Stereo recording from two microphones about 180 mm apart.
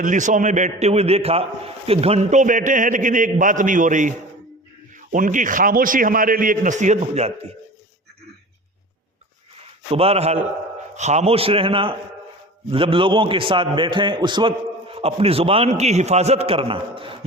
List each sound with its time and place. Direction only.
0.0 s a man's voice: 45° right (ahead or behind)
9.9 s a man's voice: 35° right (ahead or behind)